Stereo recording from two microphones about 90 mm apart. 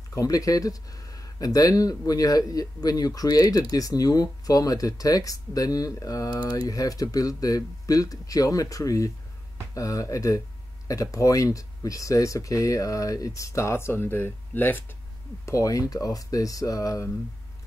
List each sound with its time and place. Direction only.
0.1 s speech: 40° left (ahead or behind); by 14.9 s 20° left (ahead or behind)
15.4 s speech: 35° left (ahead or behind)